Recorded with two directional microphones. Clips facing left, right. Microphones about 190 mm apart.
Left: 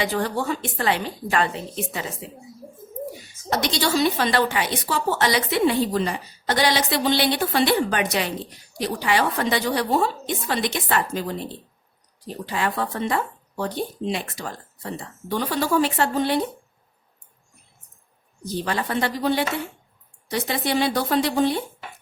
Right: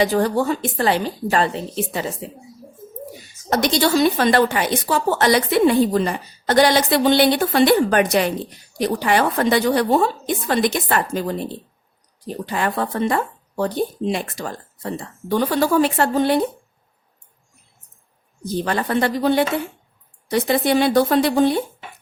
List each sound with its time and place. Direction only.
0.0 s a woman's voice: 40° right (ahead or behind)
3.5 s a woman's voice: 50° right (ahead or behind)
12.5 s a woman's voice: 50° right (ahead or behind)
18.4 s a woman's voice: 50° right (ahead or behind)